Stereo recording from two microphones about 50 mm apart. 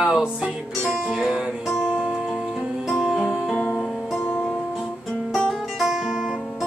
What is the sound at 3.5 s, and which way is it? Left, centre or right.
Music, centre.